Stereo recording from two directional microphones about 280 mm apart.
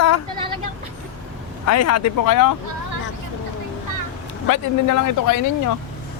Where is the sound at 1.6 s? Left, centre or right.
Left.